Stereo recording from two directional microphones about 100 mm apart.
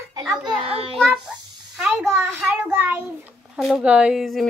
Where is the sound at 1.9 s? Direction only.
20° right (ahead or behind).